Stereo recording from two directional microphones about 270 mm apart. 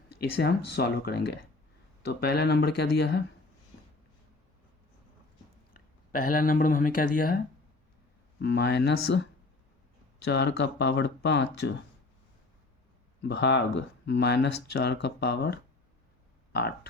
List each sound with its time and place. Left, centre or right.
0.1 s speech: left
5.7 s speech: left
10.2 s speech: left
13.2 s speech: left
16.5 s a sound: left